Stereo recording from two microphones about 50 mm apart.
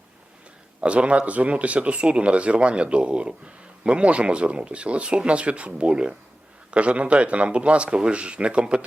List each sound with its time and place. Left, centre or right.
0.8 s speech: right